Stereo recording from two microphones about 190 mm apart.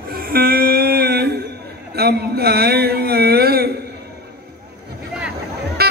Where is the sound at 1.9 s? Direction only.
55° right (ahead or behind).